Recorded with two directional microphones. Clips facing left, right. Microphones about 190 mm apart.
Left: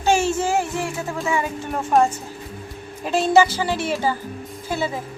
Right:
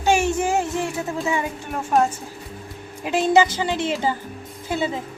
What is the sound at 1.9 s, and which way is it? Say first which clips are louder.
Speech: left 2 dB; centre (ahead or behind).